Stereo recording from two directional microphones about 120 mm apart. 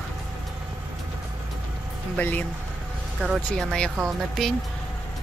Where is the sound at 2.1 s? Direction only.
15° left (ahead or behind).